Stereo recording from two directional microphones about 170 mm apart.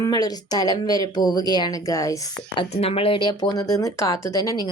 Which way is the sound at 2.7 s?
35° left (ahead or behind).